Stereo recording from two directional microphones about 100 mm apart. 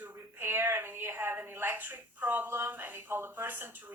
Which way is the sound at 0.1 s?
25° right (ahead or behind).